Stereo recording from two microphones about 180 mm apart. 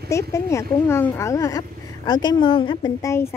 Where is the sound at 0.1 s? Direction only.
15° left (ahead or behind).